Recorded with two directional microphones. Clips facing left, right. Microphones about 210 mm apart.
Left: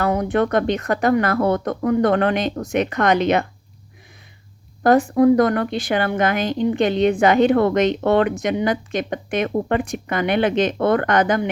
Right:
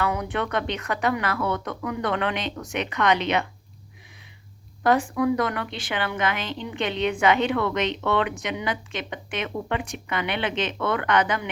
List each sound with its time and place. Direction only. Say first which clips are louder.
0.0 s speech: left 7 dB; 40° left (ahead or behind)
4.8 s speech: left 7 dB; 40° left (ahead or behind)